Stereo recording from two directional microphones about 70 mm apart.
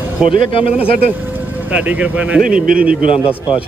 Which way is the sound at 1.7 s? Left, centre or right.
Centre.